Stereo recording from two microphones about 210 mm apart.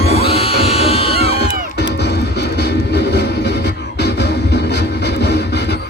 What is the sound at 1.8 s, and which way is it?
Music, 55° left (ahead or behind).